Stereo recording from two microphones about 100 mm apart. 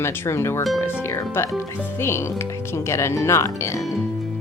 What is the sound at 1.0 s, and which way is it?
Music, 25° left (ahead or behind).